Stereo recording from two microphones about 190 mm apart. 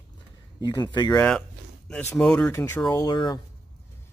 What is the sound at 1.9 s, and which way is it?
Speech, 10° left (ahead or behind).